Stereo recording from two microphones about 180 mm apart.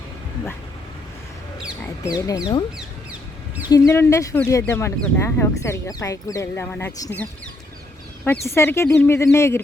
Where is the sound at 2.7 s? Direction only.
10° right (ahead or behind).